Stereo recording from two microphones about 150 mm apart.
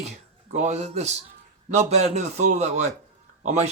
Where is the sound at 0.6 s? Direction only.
50° right (ahead or behind).